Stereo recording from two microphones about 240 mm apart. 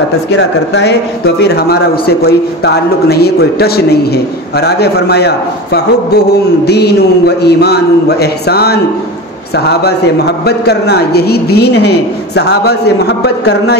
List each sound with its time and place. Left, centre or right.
0.3 s speech: left